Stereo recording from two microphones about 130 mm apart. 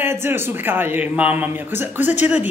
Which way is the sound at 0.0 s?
15° right (ahead or behind).